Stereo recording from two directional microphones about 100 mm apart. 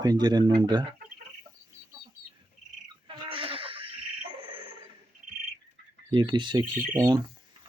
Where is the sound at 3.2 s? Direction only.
65° right (ahead or behind).